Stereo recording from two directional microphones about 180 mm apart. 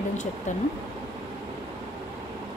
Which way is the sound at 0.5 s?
40° left (ahead or behind).